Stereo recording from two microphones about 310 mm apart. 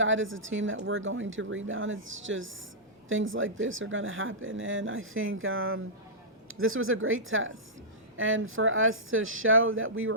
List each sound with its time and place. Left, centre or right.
0.0 s speech: right